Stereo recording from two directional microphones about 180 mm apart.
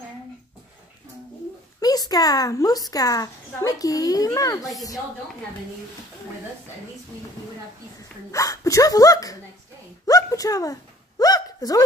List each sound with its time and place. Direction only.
1.8 s a woman's voice: 20° left (ahead or behind)
8.3 s a woman's voice: 20° left (ahead or behind)
10.0 s a sound: 20° left (ahead or behind)